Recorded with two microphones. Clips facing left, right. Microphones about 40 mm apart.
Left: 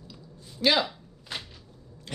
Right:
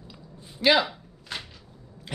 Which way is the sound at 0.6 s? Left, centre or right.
Centre.